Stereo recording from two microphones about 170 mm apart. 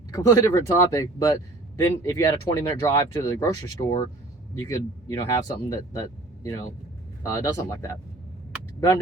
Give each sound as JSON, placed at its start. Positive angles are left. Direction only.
{"t": 0.1, "sound": "speech", "side_deg": 20}